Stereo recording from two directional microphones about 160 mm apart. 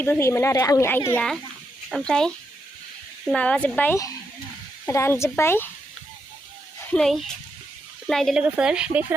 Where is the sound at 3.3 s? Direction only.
5° left (ahead or behind).